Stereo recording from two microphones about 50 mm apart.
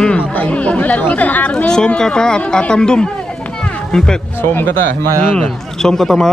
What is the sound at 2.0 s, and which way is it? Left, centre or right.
Speech, centre.